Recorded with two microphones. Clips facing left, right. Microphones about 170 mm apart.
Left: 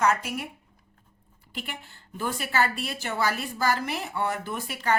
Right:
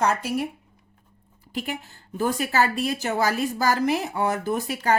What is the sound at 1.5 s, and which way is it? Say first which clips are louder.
A woman's voice: right 8 dB; 40° right (ahead or behind).